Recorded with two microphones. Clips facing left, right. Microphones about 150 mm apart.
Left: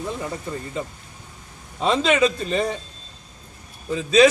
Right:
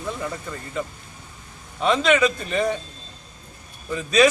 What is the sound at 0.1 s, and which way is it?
A man's voice, 25° left (ahead or behind).